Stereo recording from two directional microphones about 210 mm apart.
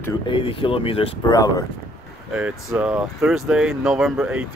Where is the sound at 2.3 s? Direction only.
5° right (ahead or behind).